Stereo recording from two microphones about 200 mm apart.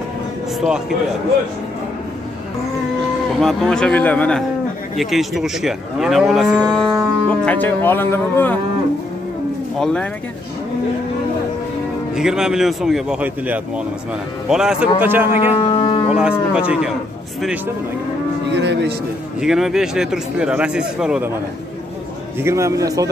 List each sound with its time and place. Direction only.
0.6 s livestock: 5° right (ahead or behind)
3.3 s livestock: 5° left (ahead or behind)
7.4 s speech: 10° left (ahead or behind)
12.2 s livestock: 5° right (ahead or behind)
14.5 s speech: 5° right (ahead or behind)
15.5 s a sound: 25° left (ahead or behind)
16.1 s livestock: 5° right (ahead or behind)
18.5 s speech: 60° right (ahead or behind)
19.4 s livestock: centre (ahead or behind)
22.4 s speech: 15° right (ahead or behind)